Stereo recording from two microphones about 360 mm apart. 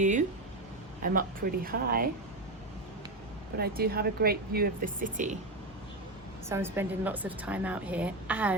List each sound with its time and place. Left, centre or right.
0.0 s speech: right
3.6 s speech: right
6.5 s speech: centre